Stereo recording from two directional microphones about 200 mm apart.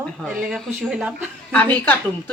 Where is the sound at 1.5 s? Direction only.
10° left (ahead or behind).